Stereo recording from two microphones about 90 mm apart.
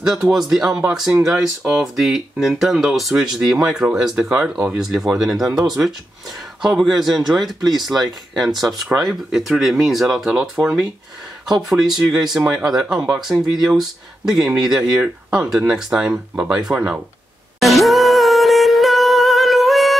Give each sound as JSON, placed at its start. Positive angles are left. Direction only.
{"t": 0.0, "sound": "speech", "side_deg": -5}
{"t": 4.3, "sound": "speech", "side_deg": -20}
{"t": 4.7, "sound": "speech", "side_deg": -5}
{"t": 10.5, "sound": "speech", "side_deg": -15}
{"t": 12.1, "sound": "speech", "side_deg": -5}
{"t": 17.6, "sound": "music", "side_deg": 0}